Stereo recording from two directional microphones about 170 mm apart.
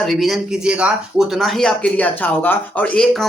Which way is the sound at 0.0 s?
Centre (ahead or behind).